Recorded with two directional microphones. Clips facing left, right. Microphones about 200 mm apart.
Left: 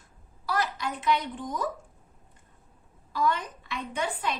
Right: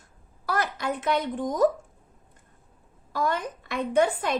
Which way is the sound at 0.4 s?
55° right (ahead or behind).